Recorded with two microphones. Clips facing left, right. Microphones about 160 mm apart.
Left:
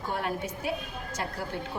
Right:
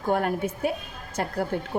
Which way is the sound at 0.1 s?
50° right (ahead or behind).